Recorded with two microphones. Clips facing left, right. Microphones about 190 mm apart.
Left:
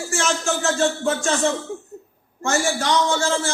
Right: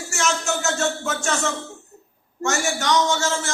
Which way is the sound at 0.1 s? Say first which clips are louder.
Left 1 dB; 30° left (ahead or behind).